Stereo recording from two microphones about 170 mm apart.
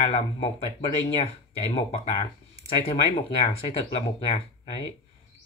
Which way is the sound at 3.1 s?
35° left (ahead or behind).